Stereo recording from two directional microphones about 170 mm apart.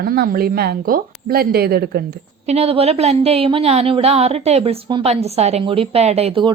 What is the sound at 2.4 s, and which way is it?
A woman's voice, 35° right (ahead or behind).